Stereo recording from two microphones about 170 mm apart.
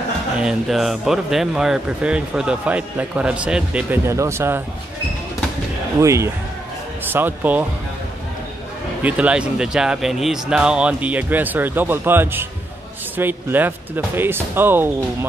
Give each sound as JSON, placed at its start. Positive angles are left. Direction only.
{"t": 0.4, "sound": "speech", "side_deg": 0}
{"t": 5.9, "sound": "speech", "side_deg": -15}
{"t": 9.0, "sound": "speech", "side_deg": -5}